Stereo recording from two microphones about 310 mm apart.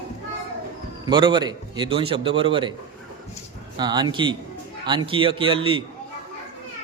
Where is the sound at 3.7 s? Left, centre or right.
Centre.